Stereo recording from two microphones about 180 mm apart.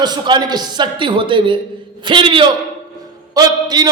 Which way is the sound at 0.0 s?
25° right (ahead or behind).